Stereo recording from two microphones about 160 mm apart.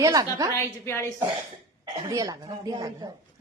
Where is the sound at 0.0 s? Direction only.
20° right (ahead or behind).